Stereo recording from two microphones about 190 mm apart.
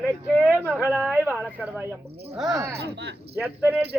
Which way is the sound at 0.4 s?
10° right (ahead or behind).